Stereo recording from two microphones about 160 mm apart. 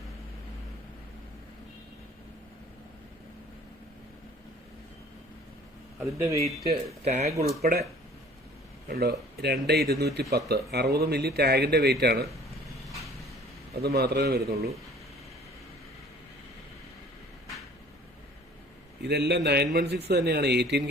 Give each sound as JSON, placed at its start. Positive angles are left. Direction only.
{"t": 6.0, "sound": "speech", "side_deg": -20}
{"t": 7.0, "sound": "speech", "side_deg": -45}
{"t": 7.4, "sound": "speech", "side_deg": -70}
{"t": 8.9, "sound": "a man's voice", "side_deg": -85}
{"t": 13.8, "sound": "a man's voice", "side_deg": -85}
{"t": 19.0, "sound": "a man's voice", "side_deg": -90}